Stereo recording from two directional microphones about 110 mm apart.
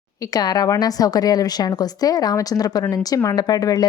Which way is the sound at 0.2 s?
35° left (ahead or behind).